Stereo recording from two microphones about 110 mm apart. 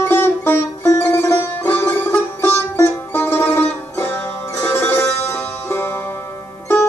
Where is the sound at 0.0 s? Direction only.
20° left (ahead or behind).